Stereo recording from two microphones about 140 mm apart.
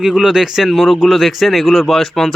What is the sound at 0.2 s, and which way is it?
Speech, 5° right (ahead or behind).